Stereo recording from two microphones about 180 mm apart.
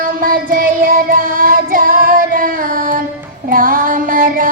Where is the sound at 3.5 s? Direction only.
50° right (ahead or behind).